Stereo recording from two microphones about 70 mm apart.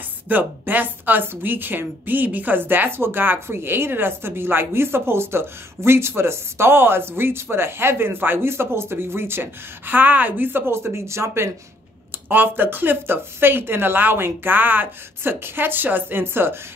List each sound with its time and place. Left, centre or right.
0.3 s a woman's voice: right
12.3 s a woman's voice: right